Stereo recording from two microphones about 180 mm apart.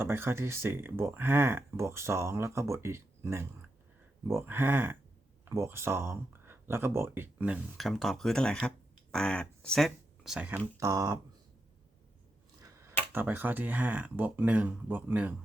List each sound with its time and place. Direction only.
0.0 s speech: 15° right (ahead or behind)
10.8 s speech: 20° right (ahead or behind)
13.1 s speech: 10° right (ahead or behind)